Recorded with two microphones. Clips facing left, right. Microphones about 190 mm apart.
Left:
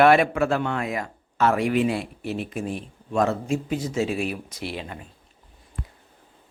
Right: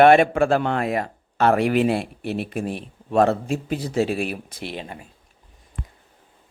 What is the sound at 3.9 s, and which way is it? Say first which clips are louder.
Speech: right 5 dB; 55° right (ahead or behind).